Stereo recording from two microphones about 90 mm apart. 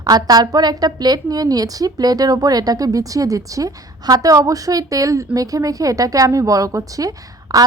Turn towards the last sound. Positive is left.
turn(degrees=-45)  # may be behind; listen again after turning